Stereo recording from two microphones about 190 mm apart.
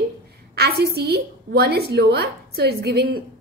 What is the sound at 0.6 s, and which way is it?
A woman's voice, 55° right (ahead or behind).